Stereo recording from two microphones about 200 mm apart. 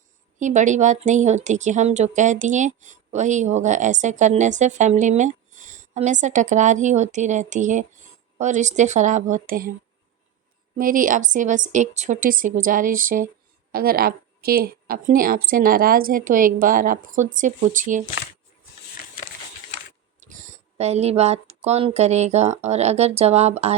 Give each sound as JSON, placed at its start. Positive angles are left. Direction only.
{"t": 0.3, "sound": "speech", "side_deg": -40}
{"t": 10.8, "sound": "a woman's voice", "side_deg": -45}
{"t": 20.1, "sound": "speech", "side_deg": -40}